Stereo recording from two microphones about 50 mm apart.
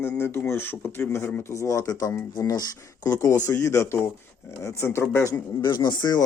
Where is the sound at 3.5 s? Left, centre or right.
Left.